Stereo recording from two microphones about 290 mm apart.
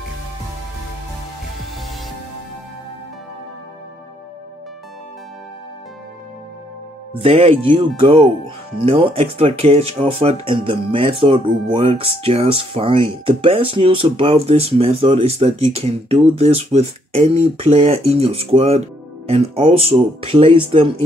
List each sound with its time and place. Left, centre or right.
7.2 s speech: centre